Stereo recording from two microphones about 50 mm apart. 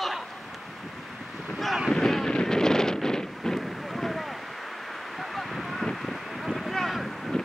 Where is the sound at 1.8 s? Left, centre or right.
Centre.